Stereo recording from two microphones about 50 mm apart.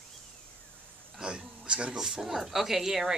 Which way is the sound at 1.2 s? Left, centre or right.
Centre.